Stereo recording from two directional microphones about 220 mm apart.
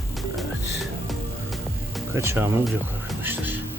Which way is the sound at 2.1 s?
10° right (ahead or behind).